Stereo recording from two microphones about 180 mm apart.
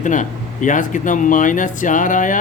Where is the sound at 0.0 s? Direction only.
45° left (ahead or behind).